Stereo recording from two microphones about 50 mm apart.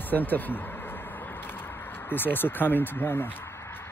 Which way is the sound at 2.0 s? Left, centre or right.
Left.